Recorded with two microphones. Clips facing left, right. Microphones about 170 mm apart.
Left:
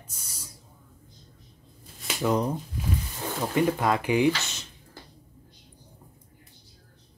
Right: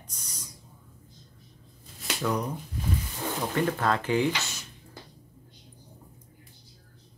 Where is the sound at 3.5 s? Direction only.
15° left (ahead or behind).